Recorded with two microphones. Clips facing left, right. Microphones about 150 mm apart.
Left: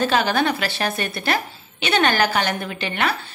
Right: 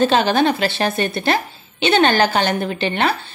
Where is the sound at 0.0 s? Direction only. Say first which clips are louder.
Right 4 dB; 25° right (ahead or behind).